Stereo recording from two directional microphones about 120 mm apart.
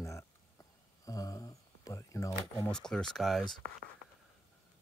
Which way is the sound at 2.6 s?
5° left (ahead or behind).